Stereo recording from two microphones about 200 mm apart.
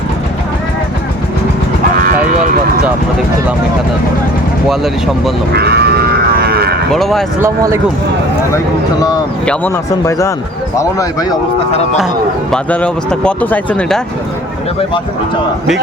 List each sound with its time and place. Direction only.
4.7 s speech: centre (ahead or behind)
5.5 s speech: 55° right (ahead or behind)
6.5 s moo: 50° right (ahead or behind)
6.9 s speech: centre (ahead or behind)
7.4 s speech: 15° right (ahead or behind)
8.5 s speech: 20° left (ahead or behind)
12.5 s speech: 5° left (ahead or behind)